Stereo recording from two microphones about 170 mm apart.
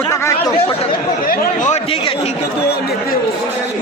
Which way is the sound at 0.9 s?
60° left (ahead or behind).